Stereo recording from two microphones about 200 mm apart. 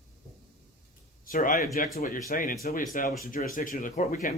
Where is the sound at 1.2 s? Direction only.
45° left (ahead or behind).